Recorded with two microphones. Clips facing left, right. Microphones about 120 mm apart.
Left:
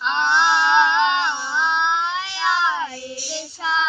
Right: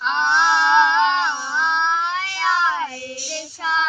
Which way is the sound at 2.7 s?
5° right (ahead or behind).